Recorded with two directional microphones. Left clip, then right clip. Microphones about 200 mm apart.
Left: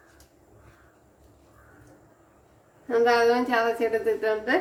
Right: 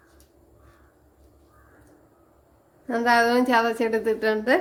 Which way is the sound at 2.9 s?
50° right (ahead or behind).